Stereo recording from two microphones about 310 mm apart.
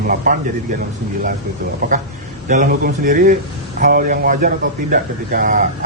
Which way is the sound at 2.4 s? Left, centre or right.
Right.